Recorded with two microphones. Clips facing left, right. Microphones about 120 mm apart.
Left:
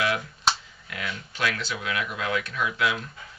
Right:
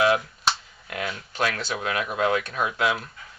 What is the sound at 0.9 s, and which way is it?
Speech, 40° right (ahead or behind).